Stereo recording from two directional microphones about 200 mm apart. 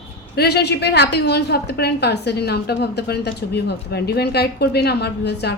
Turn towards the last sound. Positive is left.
turn(degrees=55)  # may be behind; listen again after turning